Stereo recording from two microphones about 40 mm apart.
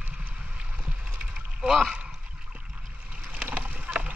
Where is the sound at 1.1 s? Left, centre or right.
Right.